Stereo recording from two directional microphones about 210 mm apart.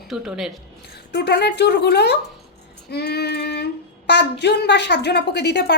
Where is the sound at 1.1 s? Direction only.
50° left (ahead or behind).